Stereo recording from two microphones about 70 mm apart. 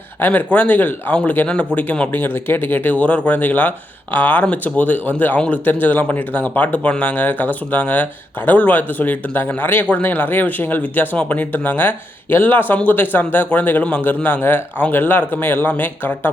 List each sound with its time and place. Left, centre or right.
0.2 s speech: left